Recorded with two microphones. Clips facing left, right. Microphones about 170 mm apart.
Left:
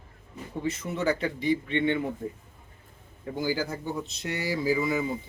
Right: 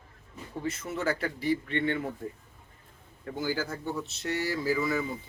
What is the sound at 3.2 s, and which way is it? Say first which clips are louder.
Speech: left 3 dB; 15° left (ahead or behind).